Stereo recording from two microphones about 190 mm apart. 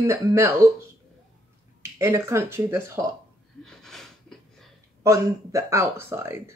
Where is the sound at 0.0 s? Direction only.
15° right (ahead or behind).